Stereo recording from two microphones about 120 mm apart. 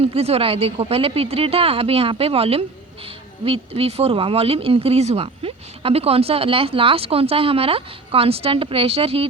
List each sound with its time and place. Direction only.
0.0 s speech: 60° right (ahead or behind)